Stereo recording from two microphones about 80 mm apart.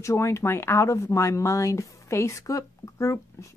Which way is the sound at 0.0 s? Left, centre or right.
Left.